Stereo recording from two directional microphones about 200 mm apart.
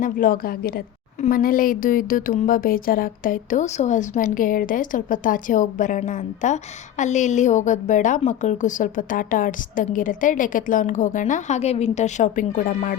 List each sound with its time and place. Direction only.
0.0 s speech: 45° left (ahead or behind)